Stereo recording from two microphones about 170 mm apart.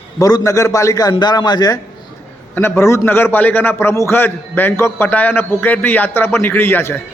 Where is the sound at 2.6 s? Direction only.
15° left (ahead or behind).